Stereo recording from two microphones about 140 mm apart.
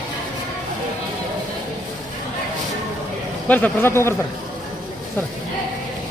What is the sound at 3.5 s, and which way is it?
Speech, 15° left (ahead or behind).